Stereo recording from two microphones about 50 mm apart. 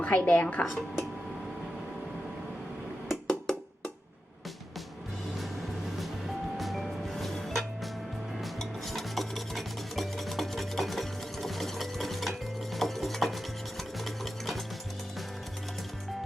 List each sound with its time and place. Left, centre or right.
0.0 s speech: left
3.1 s wood block: centre
6.6 s music: centre
8.4 s filing: centre
14.0 s stir: centre